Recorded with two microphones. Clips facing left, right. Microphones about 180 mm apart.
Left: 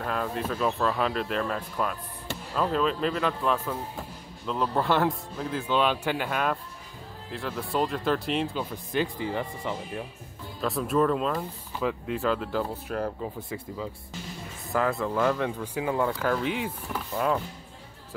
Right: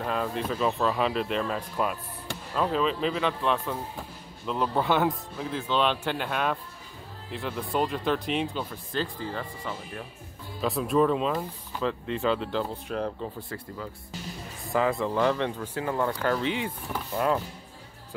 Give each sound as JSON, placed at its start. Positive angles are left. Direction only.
{"t": 0.0, "sound": "speech", "side_deg": 0}
{"t": 8.9, "sound": "speech", "side_deg": 15}
{"t": 10.6, "sound": "speech", "side_deg": 0}
{"t": 13.5, "sound": "speech", "side_deg": 15}
{"t": 14.7, "sound": "speech", "side_deg": 0}